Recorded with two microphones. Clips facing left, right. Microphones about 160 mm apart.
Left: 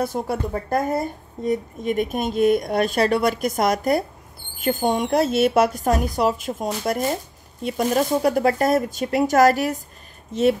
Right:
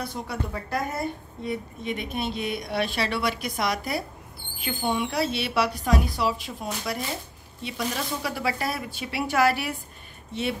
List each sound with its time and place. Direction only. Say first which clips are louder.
0.0 s speech: left 8 dB; 45° left (ahead or behind)